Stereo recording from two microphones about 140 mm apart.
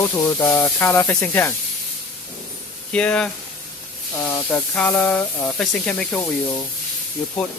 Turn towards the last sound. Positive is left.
turn(degrees=10)  # may be behind; listen again after turning